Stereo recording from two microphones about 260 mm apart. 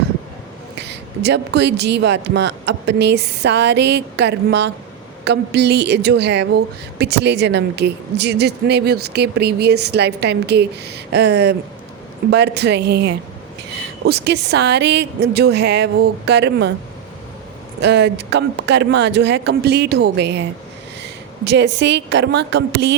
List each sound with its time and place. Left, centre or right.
0.8 s a woman's voice: right
17.7 s a woman's voice: right